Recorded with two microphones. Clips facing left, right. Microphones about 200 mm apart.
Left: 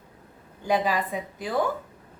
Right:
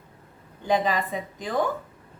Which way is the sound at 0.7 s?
10° left (ahead or behind).